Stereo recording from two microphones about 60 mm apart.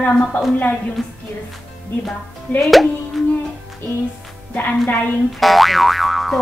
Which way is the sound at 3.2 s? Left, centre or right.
Centre.